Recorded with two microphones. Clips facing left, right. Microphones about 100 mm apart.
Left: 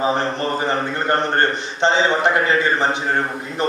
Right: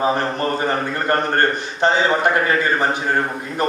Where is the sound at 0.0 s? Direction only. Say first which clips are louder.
Right 1 dB; 30° left (ahead or behind).